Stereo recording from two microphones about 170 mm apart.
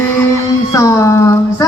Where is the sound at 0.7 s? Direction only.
20° left (ahead or behind).